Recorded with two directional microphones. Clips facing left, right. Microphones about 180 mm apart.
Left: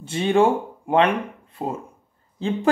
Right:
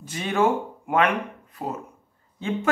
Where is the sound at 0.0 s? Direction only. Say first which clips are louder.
Left 5 dB; 30° left (ahead or behind).